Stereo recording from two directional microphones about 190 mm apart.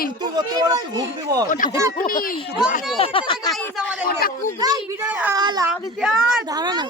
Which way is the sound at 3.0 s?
30° left (ahead or behind).